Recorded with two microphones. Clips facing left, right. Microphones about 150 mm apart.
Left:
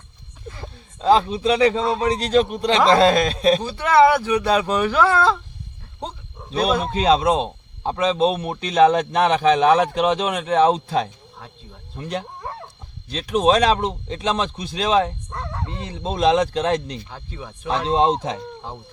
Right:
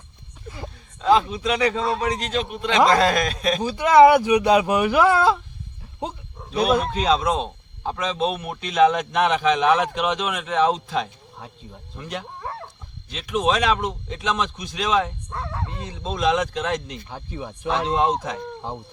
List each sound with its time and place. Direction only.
1.0 s a man's voice: 30° left (ahead or behind)
3.6 s speech: 10° right (ahead or behind)
6.8 s speech: 30° left (ahead or behind)
11.3 s speech: 10° right (ahead or behind)
11.9 s speech: 30° left (ahead or behind)
15.3 s dog: 5° right (ahead or behind)
15.7 s speech: 25° left (ahead or behind)
17.1 s speech: 15° right (ahead or behind)
17.8 s a man's voice: 30° left (ahead or behind)